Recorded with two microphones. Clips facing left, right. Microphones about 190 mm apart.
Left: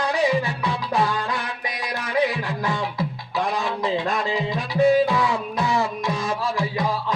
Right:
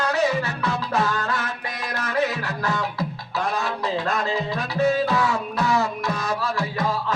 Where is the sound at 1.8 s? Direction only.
10° left (ahead or behind).